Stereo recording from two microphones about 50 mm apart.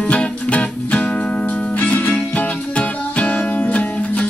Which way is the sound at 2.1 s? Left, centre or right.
Left.